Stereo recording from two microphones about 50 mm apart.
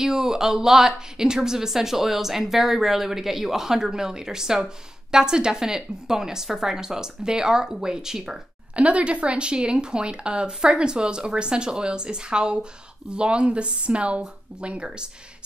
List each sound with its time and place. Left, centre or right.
0.0 s a woman's voice: centre
8.7 s a woman's voice: right